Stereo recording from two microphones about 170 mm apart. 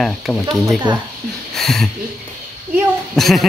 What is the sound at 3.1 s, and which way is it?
Speech, centre (ahead or behind).